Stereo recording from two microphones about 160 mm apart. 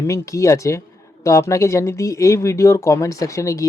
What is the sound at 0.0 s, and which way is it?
Speech, 20° left (ahead or behind).